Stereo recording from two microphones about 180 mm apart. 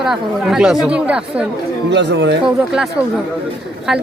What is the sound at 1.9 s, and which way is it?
Speech, 75° right (ahead or behind).